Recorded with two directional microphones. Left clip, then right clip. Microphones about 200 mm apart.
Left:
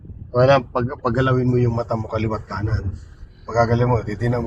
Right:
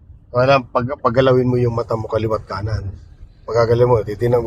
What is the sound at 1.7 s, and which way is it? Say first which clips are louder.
A man's voice: right 4 dB; 20° right (ahead or behind).